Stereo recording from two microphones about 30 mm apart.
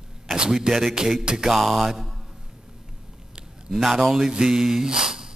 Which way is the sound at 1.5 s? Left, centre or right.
Centre.